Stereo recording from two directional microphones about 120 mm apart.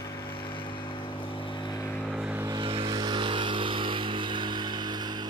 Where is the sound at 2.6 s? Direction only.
45° right (ahead or behind).